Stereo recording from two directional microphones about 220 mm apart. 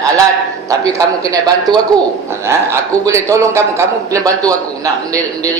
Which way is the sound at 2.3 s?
10° right (ahead or behind).